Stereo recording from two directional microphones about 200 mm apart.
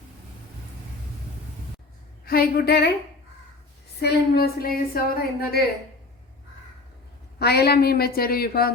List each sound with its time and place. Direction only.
2.2 s a woman's voice: 50° left (ahead or behind)
4.0 s a woman's voice: 50° left (ahead or behind)
7.3 s a woman's voice: 55° left (ahead or behind)